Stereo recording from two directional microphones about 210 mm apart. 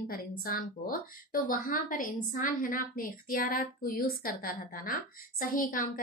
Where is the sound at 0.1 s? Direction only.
45° left (ahead or behind).